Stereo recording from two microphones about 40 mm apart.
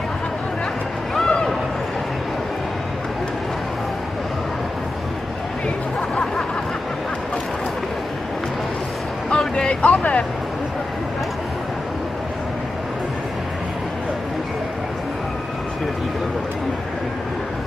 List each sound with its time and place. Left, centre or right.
1.2 s a sound: left
9.3 s vehicle: left
9.8 s vehicle: left